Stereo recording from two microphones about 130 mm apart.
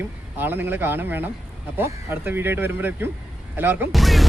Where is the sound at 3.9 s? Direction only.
Centre (ahead or behind).